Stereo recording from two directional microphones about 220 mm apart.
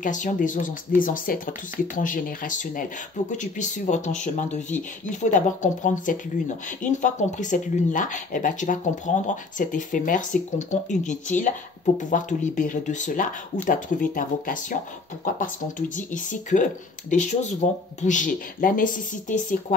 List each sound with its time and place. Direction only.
0.0 s speech: 35° left (ahead or behind)
16.0 s speech: 35° left (ahead or behind)